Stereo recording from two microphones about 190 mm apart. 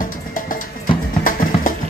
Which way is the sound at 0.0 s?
45° left (ahead or behind).